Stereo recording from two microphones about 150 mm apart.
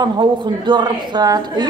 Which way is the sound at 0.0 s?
30° right (ahead or behind).